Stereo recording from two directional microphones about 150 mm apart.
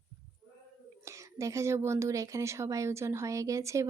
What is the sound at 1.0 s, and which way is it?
Speech, 20° right (ahead or behind).